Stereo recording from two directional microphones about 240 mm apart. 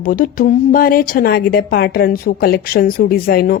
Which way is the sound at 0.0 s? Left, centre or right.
Left.